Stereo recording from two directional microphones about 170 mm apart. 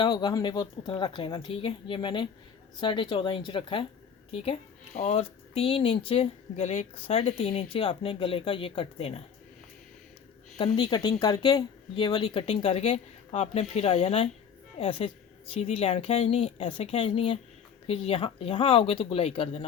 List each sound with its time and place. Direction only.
0.0 s a woman's voice: 25° left (ahead or behind)
4.9 s speech: 40° left (ahead or behind)
10.6 s speech: 25° left (ahead or behind)